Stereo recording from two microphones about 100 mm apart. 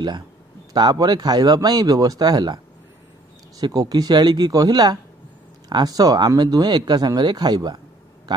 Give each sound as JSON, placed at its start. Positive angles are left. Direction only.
{"t": 0.7, "sound": "speech", "side_deg": -40}